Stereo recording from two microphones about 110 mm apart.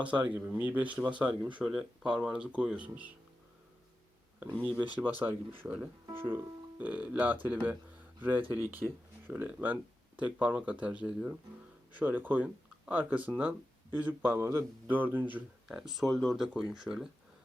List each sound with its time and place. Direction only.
0.0 s speech: 10° right (ahead or behind)
4.8 s speech: 15° right (ahead or behind)
15.8 s speech: centre (ahead or behind)